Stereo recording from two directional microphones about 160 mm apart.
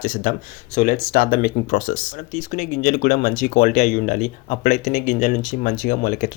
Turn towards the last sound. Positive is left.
turn(degrees=55)  # may be behind; listen again after turning